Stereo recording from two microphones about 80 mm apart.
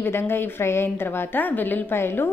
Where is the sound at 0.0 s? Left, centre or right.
Left.